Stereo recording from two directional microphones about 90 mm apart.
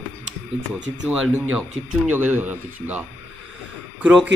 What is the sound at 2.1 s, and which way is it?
Speech, 20° right (ahead or behind).